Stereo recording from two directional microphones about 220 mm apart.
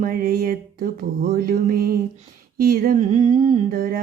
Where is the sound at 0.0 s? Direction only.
40° right (ahead or behind).